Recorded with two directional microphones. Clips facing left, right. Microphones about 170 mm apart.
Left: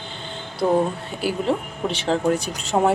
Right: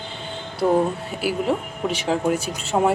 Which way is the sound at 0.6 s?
Centre (ahead or behind).